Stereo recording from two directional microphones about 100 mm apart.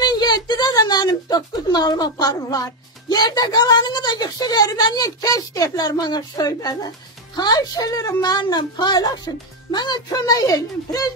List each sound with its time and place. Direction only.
0.0 s a woman's voice: 45° left (ahead or behind)